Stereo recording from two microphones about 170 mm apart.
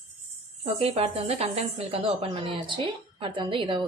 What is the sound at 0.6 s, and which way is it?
Speech, 35° right (ahead or behind).